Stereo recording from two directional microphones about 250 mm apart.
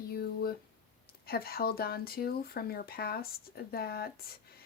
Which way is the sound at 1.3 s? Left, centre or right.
Left.